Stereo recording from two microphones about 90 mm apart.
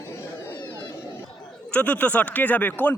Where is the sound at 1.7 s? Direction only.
15° left (ahead or behind).